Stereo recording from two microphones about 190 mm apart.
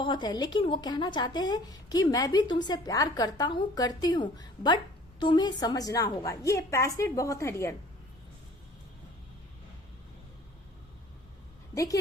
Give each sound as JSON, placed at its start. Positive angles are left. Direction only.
{"t": 0.0, "sound": "a woman's voice", "side_deg": 25}
{"t": 11.7, "sound": "a woman's voice", "side_deg": 15}